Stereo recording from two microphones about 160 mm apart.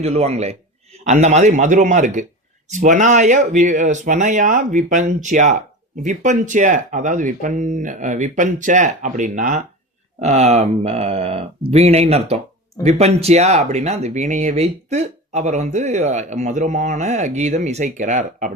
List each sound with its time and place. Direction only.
0.0 s speech: 40° right (ahead or behind)